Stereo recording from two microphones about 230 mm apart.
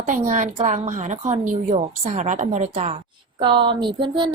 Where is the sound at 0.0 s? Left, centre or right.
Right.